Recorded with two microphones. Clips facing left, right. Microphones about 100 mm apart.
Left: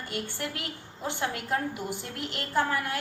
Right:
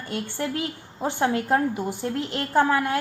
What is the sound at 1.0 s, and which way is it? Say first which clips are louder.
Speech: right 8 dB; 45° right (ahead or behind).